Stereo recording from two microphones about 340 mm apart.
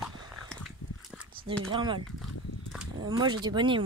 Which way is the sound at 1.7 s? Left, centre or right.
Centre.